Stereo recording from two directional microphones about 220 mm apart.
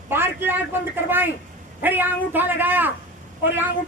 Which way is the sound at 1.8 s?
10° right (ahead or behind).